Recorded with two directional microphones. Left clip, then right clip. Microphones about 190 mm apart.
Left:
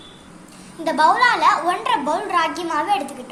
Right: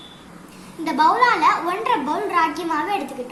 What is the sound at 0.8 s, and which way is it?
A woman's voice, 40° left (ahead or behind).